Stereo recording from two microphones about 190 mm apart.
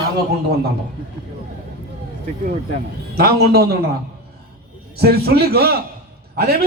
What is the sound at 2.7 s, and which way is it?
A man's voice, 55° right (ahead or behind).